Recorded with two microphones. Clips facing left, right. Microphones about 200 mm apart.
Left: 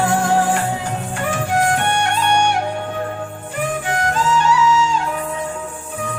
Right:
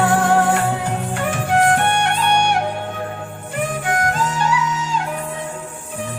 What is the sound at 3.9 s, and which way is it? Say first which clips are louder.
Music: left 3 dB; 50° right (ahead or behind).